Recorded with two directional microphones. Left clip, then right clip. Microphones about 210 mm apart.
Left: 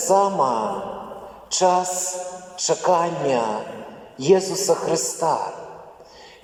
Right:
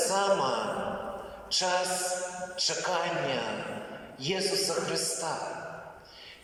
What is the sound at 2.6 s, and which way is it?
A man's voice, 50° left (ahead or behind).